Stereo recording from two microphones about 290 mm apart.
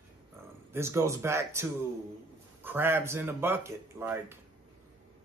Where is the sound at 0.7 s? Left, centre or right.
Centre.